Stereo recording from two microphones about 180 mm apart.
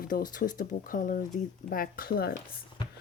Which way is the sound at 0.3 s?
50° left (ahead or behind).